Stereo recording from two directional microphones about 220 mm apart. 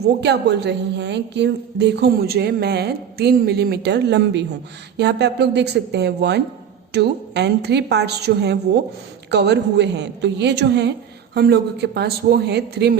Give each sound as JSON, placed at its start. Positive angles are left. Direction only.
{"t": 0.2, "sound": "a woman's voice", "side_deg": -50}